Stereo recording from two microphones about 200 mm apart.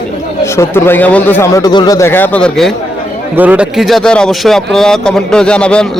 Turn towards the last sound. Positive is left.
turn(degrees=5)  # may be behind; listen again after turning